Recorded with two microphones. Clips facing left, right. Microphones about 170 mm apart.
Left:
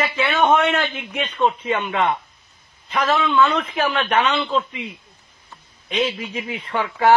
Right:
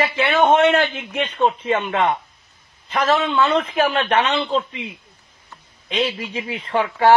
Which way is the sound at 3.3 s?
30° right (ahead or behind).